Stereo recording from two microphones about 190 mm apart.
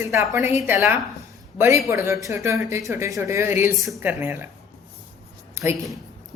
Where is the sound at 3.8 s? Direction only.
Centre (ahead or behind).